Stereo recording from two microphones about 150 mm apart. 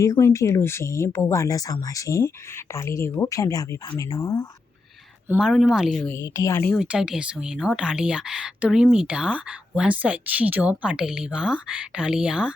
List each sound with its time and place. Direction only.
0.0 s speech: 20° left (ahead or behind)
5.4 s speech: 5° right (ahead or behind)
6.1 s speech: 20° left (ahead or behind)
6.7 s speech: 5° right (ahead or behind)